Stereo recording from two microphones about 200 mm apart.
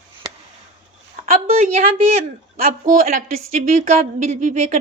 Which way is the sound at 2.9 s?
40° right (ahead or behind).